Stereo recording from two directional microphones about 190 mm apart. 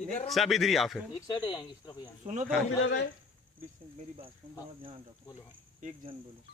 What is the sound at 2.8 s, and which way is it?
Speech, 80° left.